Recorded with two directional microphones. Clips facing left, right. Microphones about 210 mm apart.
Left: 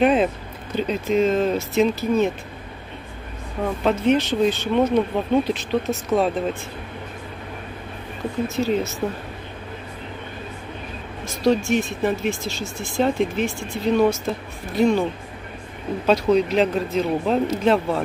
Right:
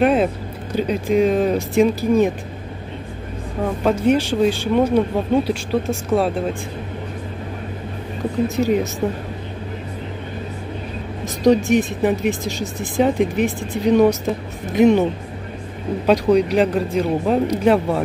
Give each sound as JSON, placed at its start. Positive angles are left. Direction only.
{"t": 0.0, "sound": "speech", "side_deg": 0}
{"t": 0.7, "sound": "speech", "side_deg": -10}
{"t": 3.6, "sound": "speech", "side_deg": -10}
{"t": 8.5, "sound": "speech", "side_deg": -15}
{"t": 11.2, "sound": "speech", "side_deg": -15}
{"t": 16.1, "sound": "speech", "side_deg": -15}